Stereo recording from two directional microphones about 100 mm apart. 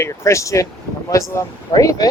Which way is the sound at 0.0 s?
30° left (ahead or behind).